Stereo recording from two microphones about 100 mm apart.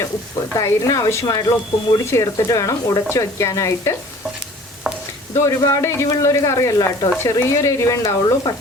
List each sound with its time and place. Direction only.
0.5 s speech: 35° left (ahead or behind)
5.3 s speech: 35° left (ahead or behind)